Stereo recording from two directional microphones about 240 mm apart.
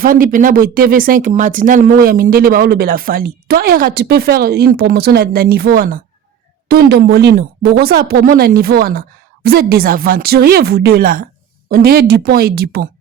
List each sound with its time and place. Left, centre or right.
0.0 s speech: right